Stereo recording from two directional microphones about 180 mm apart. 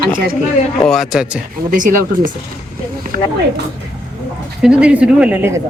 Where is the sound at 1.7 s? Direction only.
45° right (ahead or behind).